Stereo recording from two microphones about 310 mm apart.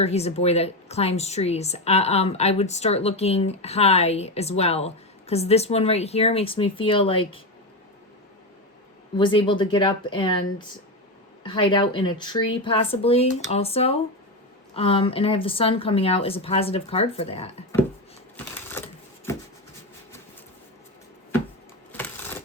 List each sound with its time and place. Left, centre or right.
0.0 s a woman's voice: left
9.1 s a woman's voice: centre
19.3 s writing: centre
21.9 s typewriter: centre